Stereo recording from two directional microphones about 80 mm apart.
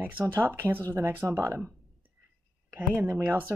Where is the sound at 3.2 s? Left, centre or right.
Right.